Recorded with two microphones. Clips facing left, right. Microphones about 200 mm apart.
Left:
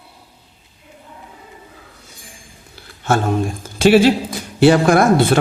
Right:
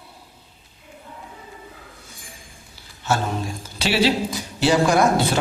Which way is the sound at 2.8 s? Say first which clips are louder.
Left 6 dB; 55° left (ahead or behind).